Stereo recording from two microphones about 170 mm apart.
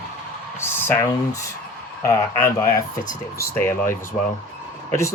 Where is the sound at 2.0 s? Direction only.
15° left (ahead or behind).